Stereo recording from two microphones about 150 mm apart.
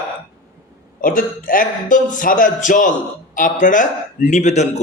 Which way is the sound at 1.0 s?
65° left (ahead or behind).